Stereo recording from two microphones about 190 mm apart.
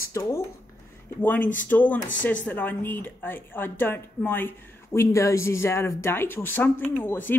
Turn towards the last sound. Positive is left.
turn(degrees=10)  # may be behind; listen again after turning